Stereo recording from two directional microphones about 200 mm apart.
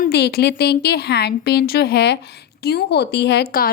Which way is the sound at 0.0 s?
55° left (ahead or behind).